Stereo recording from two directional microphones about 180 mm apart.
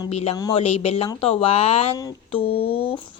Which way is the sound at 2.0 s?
20° left (ahead or behind).